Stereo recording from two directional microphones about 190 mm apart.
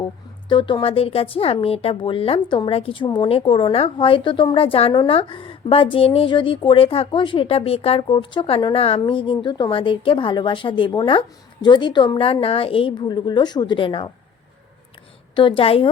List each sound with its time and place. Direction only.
0.0 s speech: 25° left (ahead or behind)
15.4 s speech: 25° left (ahead or behind)